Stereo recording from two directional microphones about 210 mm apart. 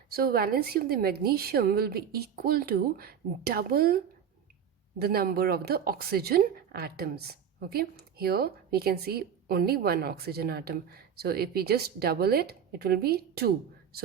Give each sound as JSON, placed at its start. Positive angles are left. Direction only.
{"t": 0.1, "sound": "a woman's voice", "side_deg": -45}